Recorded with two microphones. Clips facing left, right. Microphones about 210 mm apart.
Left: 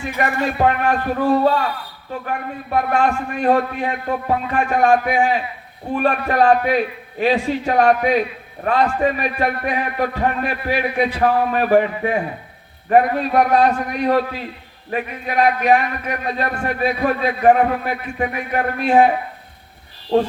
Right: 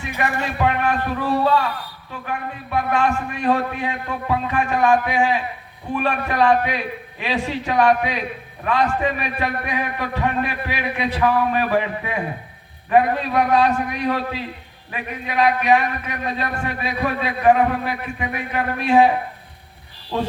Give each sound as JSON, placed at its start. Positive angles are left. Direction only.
{"t": 0.2, "sound": "a man's voice", "side_deg": 40}